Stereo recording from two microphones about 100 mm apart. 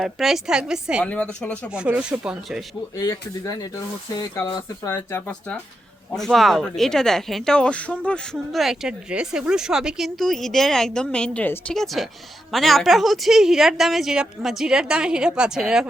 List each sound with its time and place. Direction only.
0.0 s a woman's voice: centre (ahead or behind)
1.0 s speech: 10° left (ahead or behind)
2.0 s speech: 10° right (ahead or behind)
3.1 s speech: 35° left (ahead or behind)
4.9 s speech: 20° left (ahead or behind)
6.1 s a woman's voice: centre (ahead or behind)
8.5 s a woman's voice: 5° right (ahead or behind)
11.4 s speech: 20° left (ahead or behind)
11.7 s a woman's voice: centre (ahead or behind)